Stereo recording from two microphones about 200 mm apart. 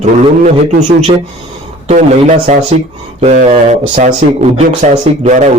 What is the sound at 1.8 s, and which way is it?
Speech, 35° right (ahead or behind).